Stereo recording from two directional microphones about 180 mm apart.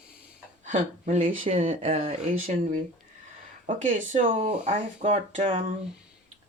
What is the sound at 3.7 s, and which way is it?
Speech, 45° right (ahead or behind).